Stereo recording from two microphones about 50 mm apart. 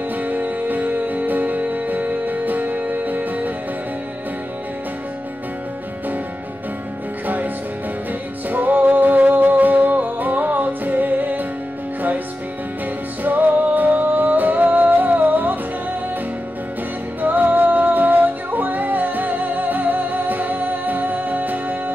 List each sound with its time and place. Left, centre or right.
0.2 s music: right
8.5 s music: right
13.2 s music: right
17.2 s music: right